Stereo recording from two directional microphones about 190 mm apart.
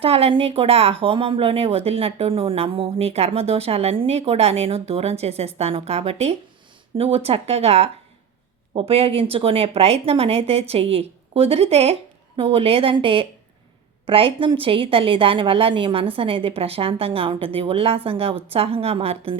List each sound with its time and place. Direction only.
0.0 s a woman's voice: 30° right (ahead or behind)